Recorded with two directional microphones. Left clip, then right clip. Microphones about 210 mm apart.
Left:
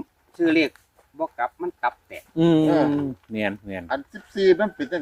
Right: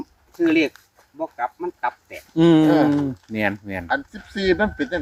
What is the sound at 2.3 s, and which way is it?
Speech, 30° right (ahead or behind).